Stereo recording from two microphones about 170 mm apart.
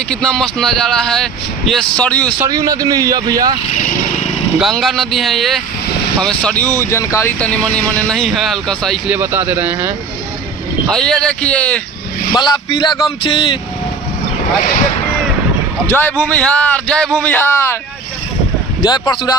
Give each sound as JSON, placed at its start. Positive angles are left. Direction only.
{"t": 0.1, "sound": "speech", "side_deg": 5}
{"t": 2.3, "sound": "speech", "side_deg": -20}
{"t": 4.6, "sound": "speech", "side_deg": 0}
{"t": 9.1, "sound": "speech", "side_deg": -10}
{"t": 10.9, "sound": "speech", "side_deg": 5}
{"t": 12.4, "sound": "speech", "side_deg": 25}
{"t": 15.9, "sound": "speech", "side_deg": 10}
{"t": 18.8, "sound": "speech", "side_deg": 25}